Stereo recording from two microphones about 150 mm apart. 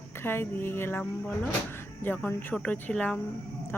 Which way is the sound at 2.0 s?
10° left (ahead or behind).